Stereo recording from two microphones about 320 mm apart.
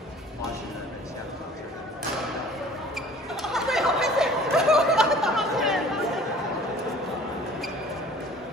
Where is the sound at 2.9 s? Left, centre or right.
Centre.